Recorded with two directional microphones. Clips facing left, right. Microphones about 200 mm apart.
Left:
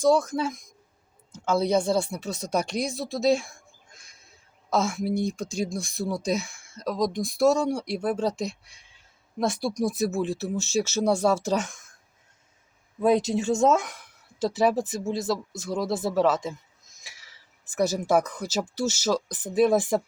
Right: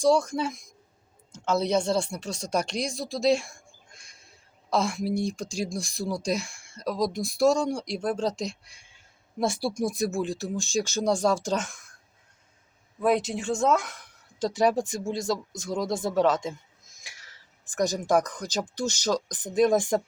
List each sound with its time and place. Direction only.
0.0 s speech: 5° left (ahead or behind)
13.6 s speech: 25° left (ahead or behind)
13.9 s speech: 5° left (ahead or behind)
17.0 s a sound: centre (ahead or behind)
18.7 s speech: 5° left (ahead or behind)